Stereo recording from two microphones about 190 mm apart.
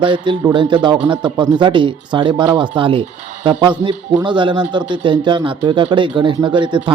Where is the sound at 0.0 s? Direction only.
25° right (ahead or behind).